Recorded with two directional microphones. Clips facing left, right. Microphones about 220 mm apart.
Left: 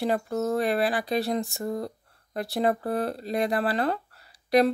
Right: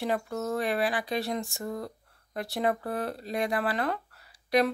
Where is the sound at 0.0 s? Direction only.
35° left (ahead or behind).